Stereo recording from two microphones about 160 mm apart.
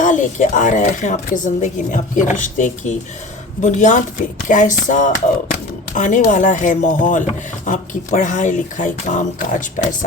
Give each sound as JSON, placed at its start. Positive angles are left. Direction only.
{"t": 0.0, "sound": "speech", "side_deg": 50}